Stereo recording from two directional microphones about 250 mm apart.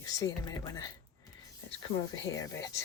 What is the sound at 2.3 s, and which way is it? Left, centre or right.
Speech, centre.